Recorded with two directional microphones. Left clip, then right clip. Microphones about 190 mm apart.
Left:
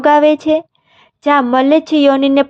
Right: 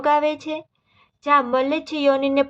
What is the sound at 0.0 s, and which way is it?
A woman's voice, 35° left (ahead or behind).